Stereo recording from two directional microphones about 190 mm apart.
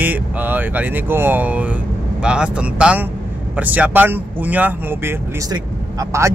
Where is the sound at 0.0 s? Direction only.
10° right (ahead or behind).